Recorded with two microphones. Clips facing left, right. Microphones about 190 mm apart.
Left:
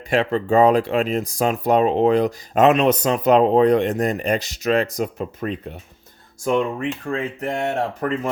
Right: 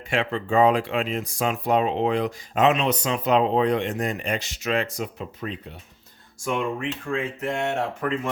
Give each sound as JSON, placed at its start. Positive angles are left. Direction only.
{"t": 0.1, "sound": "speech", "side_deg": 40}
{"t": 6.4, "sound": "speech", "side_deg": 35}